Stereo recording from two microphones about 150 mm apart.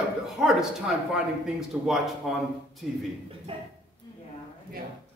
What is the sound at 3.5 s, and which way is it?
Speech, 35° right (ahead or behind).